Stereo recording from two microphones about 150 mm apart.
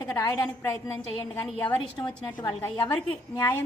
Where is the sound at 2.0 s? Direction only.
30° left (ahead or behind).